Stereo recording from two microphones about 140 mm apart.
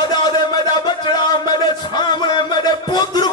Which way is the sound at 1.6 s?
30° left (ahead or behind).